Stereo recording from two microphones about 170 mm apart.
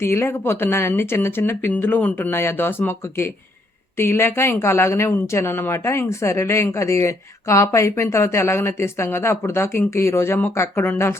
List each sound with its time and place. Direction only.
0.0 s speech: 15° left (ahead or behind)